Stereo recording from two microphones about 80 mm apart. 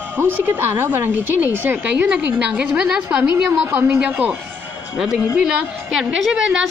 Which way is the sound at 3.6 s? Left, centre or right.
Right.